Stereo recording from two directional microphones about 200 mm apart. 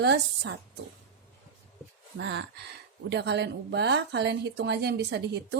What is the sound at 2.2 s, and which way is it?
A woman's voice, 60° right (ahead or behind).